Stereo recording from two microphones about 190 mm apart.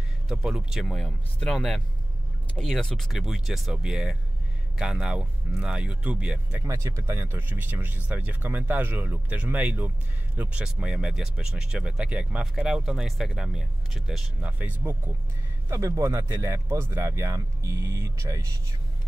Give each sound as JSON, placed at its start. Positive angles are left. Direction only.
{"t": 0.3, "sound": "speech", "side_deg": -5}